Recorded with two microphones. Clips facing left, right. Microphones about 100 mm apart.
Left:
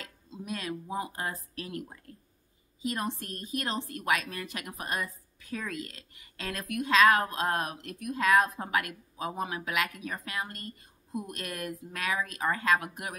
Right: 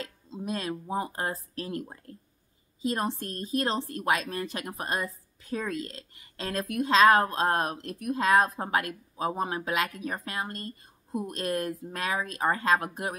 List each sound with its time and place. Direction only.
0.0 s a woman's voice: 30° right (ahead or behind)